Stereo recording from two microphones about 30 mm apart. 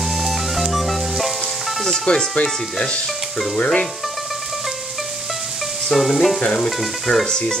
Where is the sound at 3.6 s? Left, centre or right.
Left.